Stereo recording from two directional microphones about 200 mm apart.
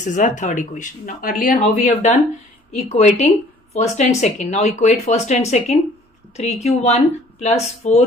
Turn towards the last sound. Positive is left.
turn(degrees=35)  # may be behind; listen again after turning